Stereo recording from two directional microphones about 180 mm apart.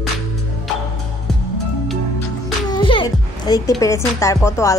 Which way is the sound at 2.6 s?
25° left (ahead or behind).